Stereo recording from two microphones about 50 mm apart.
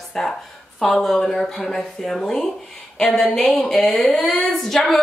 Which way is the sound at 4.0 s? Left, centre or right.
Left.